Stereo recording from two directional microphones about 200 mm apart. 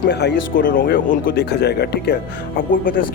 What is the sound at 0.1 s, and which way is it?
Speech, 55° left (ahead or behind).